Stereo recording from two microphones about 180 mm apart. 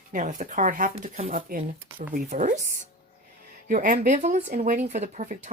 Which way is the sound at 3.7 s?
50° right (ahead or behind).